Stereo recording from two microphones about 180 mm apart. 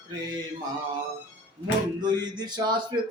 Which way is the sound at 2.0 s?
25° right (ahead or behind).